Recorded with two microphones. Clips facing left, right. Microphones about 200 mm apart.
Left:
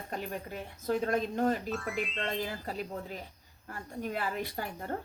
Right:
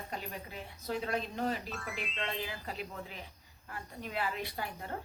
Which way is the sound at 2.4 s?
40° left (ahead or behind).